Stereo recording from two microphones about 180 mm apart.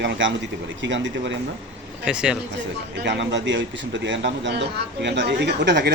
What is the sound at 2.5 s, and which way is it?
Speech, 75° right (ahead or behind).